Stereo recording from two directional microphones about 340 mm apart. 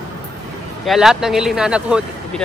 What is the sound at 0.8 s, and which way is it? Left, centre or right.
Speech, centre.